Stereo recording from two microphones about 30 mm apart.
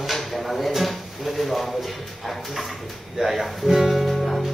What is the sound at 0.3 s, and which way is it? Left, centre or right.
Speech, centre.